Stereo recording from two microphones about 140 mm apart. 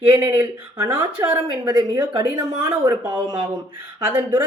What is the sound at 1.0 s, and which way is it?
A woman's voice, 35° right (ahead or behind).